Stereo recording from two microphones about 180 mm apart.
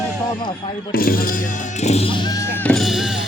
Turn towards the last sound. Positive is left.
turn(degrees=0)  # may be behind; listen again after turning